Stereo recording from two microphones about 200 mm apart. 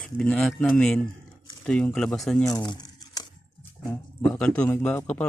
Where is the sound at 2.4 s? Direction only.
20° left (ahead or behind).